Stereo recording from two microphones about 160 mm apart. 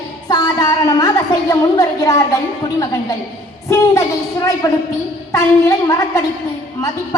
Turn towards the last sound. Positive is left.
turn(degrees=20)  # may be behind; listen again after turning